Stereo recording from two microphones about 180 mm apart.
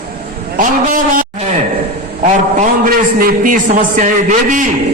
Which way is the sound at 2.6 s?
50° right (ahead or behind).